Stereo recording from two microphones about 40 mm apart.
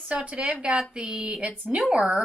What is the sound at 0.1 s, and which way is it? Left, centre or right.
Speech, right.